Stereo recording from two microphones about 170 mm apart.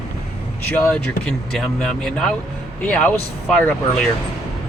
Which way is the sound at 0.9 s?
5° left (ahead or behind).